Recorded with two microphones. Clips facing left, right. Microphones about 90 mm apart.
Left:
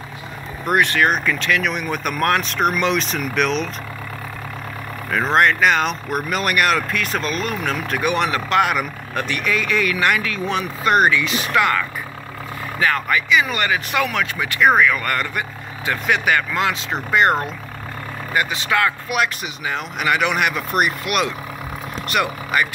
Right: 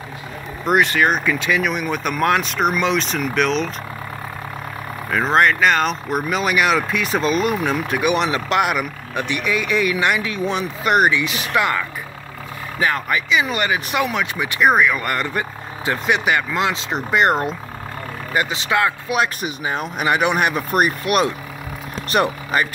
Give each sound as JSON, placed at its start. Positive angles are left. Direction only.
{"t": 0.7, "sound": "speech", "side_deg": -5}
{"t": 5.1, "sound": "speech", "side_deg": 0}
{"t": 19.4, "sound": "speech", "side_deg": -40}